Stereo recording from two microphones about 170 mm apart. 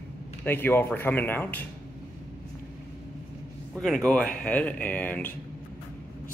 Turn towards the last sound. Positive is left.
turn(degrees=10)  # may be behind; listen again after turning